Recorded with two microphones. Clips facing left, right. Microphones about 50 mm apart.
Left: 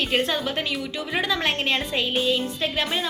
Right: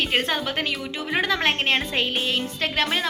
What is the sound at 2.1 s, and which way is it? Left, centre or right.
Music, right.